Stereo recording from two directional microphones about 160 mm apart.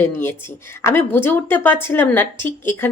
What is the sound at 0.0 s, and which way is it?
Speech, 15° left (ahead or behind).